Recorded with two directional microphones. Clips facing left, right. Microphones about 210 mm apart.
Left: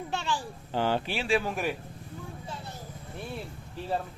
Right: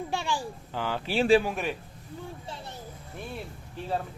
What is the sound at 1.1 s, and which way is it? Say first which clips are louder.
Speech: right 12 dB; 40° right (ahead or behind).